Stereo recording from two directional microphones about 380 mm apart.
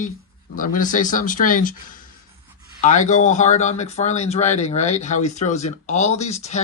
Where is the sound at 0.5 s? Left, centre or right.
Left.